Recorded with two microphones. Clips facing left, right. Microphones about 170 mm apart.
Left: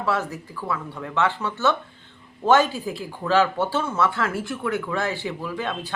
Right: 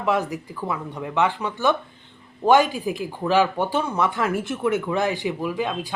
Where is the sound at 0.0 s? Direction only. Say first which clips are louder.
Right 3 dB; 15° right (ahead or behind).